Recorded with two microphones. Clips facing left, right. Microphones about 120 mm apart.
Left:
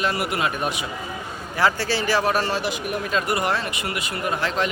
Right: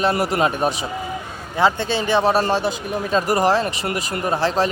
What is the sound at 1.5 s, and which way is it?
Speech, 20° right (ahead or behind).